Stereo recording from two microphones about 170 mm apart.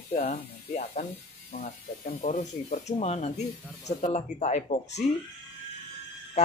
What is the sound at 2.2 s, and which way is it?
A man's voice, 45° left (ahead or behind).